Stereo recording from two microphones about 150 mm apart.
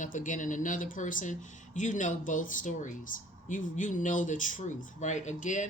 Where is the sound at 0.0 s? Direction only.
60° left (ahead or behind).